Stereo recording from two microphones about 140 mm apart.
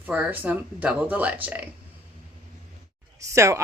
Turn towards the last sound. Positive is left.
turn(degrees=-20)  # may be behind; listen again after turning